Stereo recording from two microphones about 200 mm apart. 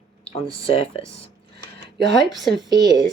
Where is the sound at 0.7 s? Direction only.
30° left (ahead or behind).